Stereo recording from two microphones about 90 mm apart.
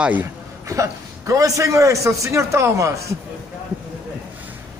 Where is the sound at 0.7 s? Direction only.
35° right (ahead or behind).